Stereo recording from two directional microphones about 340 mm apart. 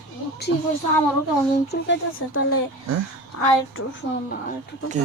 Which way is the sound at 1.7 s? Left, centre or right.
Left.